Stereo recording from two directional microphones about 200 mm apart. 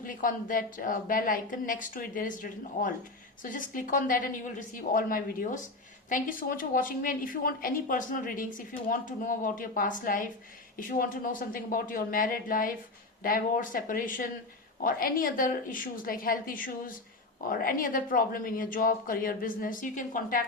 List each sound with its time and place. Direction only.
0.0 s a woman's voice: 40° left (ahead or behind)